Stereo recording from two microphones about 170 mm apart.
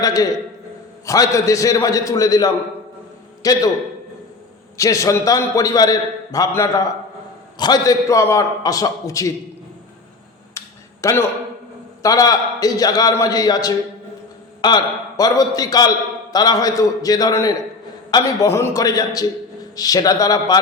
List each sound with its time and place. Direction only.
0.0 s a man's voice: 20° left (ahead or behind)
4.8 s a man's voice: 20° left (ahead or behind)
10.6 s a sound: 15° left (ahead or behind)
11.0 s a man's voice: 15° left (ahead or behind)